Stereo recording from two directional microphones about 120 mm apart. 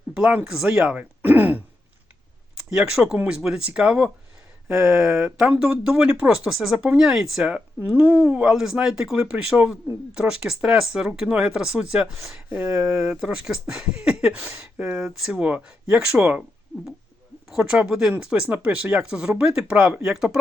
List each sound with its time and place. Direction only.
0.2 s speech: 10° right (ahead or behind)
2.6 s speech: 5° right (ahead or behind)
4.7 s speech: 20° right (ahead or behind)
4.9 s speech: 5° right (ahead or behind)
13.1 s speech: 5° right (ahead or behind)
17.7 s speech: 5° right (ahead or behind)